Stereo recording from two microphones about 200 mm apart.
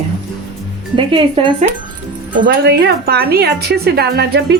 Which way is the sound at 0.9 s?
25° right (ahead or behind).